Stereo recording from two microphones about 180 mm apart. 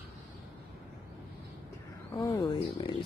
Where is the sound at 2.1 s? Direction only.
25° left (ahead or behind).